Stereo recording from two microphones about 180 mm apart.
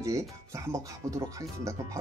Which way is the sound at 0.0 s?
15° right (ahead or behind).